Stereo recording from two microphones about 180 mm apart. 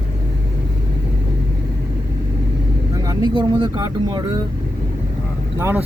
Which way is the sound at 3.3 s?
25° right (ahead or behind).